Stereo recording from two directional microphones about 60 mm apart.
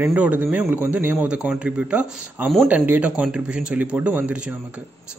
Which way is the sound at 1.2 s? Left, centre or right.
Centre.